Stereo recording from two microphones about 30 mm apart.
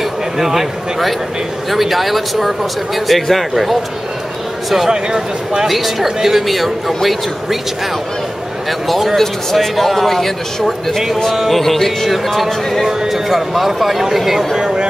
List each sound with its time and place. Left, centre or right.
0.4 s a man's voice: centre
4.6 s speech: centre
5.7 s speech: centre
8.6 s a man's voice: centre
12.1 s speech: centre
14.6 s speech: right